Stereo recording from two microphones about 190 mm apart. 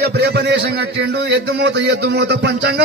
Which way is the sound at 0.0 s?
60° right (ahead or behind).